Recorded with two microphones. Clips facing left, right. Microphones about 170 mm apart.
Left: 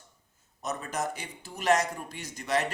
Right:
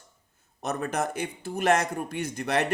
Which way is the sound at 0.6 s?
60° right (ahead or behind).